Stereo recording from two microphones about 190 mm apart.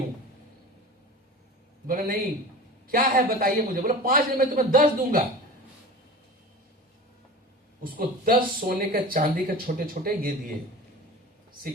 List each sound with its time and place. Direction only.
1.9 s speech: 50° right (ahead or behind)
7.9 s speech: 50° right (ahead or behind)